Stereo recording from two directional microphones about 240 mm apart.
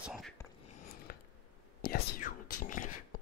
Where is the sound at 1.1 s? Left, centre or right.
Left.